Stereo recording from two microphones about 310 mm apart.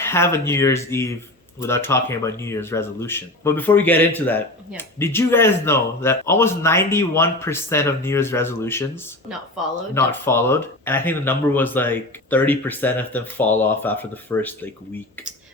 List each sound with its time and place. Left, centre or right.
0.0 s speech: centre
9.9 s speech: centre